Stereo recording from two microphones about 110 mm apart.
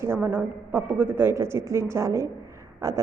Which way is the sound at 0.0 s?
20° right (ahead or behind).